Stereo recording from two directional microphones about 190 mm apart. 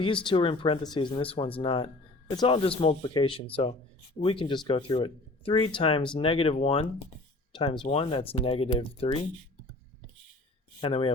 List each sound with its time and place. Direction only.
0.0 s speech: 25° left (ahead or behind)
10.8 s speech: 25° left (ahead or behind)